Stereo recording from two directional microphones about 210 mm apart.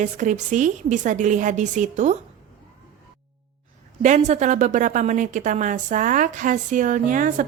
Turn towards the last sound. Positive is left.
turn(degrees=-40)  # may be behind; listen again after turning